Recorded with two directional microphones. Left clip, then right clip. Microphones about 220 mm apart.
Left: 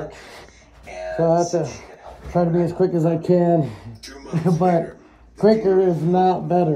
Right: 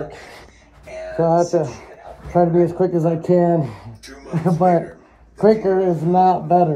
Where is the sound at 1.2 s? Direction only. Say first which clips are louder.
Right 2 dB; centre (ahead or behind).